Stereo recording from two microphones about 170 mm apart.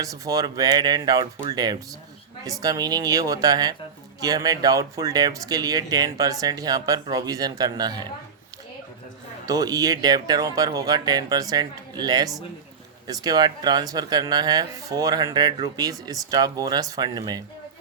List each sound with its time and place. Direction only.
0.0 s speech: 20° right (ahead or behind)
9.5 s speech: 20° right (ahead or behind)